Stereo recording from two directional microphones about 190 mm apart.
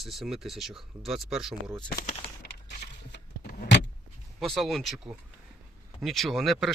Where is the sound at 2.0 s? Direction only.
35° left (ahead or behind).